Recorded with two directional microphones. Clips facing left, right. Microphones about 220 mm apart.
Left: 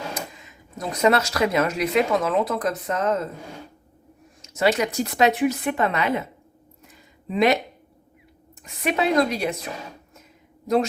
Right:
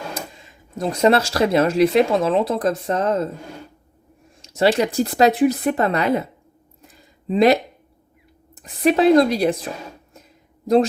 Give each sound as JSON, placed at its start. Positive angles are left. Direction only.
{"t": 0.1, "sound": "speech", "side_deg": -30}
{"t": 4.4, "sound": "speech", "side_deg": -30}
{"t": 6.8, "sound": "a sound", "side_deg": -35}
{"t": 8.5, "sound": "speech", "side_deg": -35}